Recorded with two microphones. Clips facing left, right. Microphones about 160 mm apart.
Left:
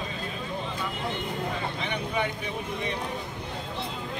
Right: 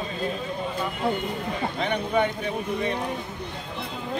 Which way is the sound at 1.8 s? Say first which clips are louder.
Right 7 dB; 50° right (ahead or behind).